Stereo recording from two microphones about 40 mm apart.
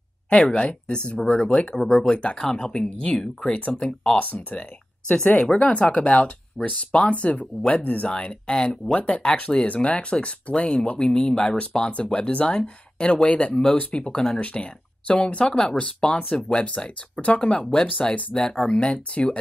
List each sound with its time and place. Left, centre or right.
0.3 s speech: left
1.8 s speech: centre
2.0 s speech: left
4.2 s speech: left
4.6 s speech: left
7.8 s speech: left
8.1 s speech: left
9.2 s speech: centre
9.7 s speech: left